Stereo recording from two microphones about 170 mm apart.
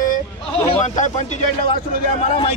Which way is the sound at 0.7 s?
45° left (ahead or behind).